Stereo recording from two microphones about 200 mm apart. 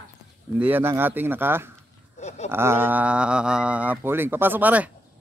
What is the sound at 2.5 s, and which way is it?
Speech, 10° right (ahead or behind).